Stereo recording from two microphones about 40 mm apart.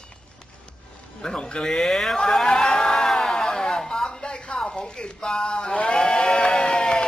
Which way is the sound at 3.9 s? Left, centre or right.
Left.